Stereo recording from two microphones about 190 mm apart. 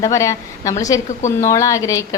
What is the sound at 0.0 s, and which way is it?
A woman's voice, 15° left (ahead or behind).